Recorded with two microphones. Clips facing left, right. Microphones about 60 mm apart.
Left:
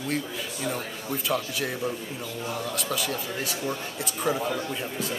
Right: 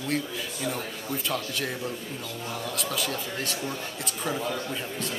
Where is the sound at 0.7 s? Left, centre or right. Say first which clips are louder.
Left 1 dB; centre.